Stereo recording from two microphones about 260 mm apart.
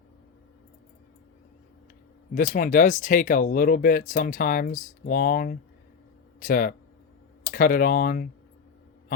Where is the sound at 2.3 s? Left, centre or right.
Left.